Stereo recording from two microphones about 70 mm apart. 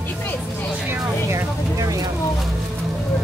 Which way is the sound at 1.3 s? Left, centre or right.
Right.